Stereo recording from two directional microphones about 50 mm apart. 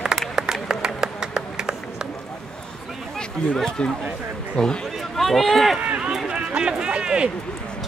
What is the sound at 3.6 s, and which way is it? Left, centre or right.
A man's voice, centre.